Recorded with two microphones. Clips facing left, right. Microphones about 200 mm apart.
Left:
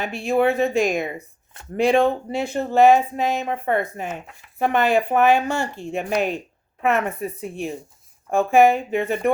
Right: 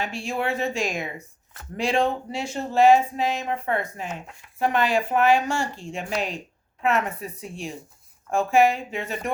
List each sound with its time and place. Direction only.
0.0 s speech: 60° left (ahead or behind)